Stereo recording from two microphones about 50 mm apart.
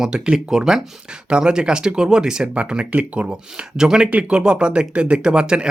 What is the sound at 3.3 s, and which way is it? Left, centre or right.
Speech, centre.